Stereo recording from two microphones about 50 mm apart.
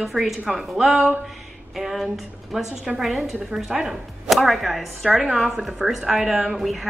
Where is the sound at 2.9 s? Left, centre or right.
Centre.